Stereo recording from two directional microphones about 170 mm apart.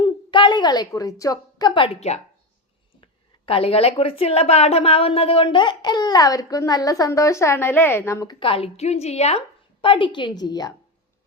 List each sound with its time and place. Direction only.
0.0 s a sound: 30° left (ahead or behind)
1.2 s a woman's voice: 20° left (ahead or behind)
8.4 s a woman's voice: 35° left (ahead or behind)